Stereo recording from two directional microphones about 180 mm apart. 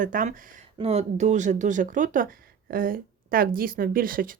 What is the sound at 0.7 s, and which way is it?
Speech, 35° right (ahead or behind).